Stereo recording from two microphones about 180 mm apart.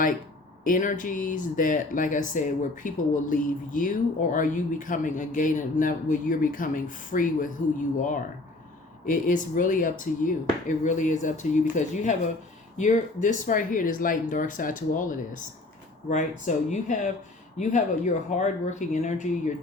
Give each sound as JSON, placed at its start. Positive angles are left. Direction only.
{"t": 0.6, "sound": "speech", "side_deg": 45}
{"t": 16.5, "sound": "speech", "side_deg": 45}